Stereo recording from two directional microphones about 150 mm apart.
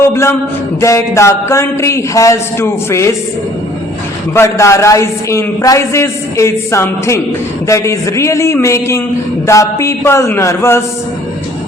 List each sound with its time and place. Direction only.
0.1 s a man's voice: 15° left (ahead or behind)
4.4 s a man's voice: 20° left (ahead or behind)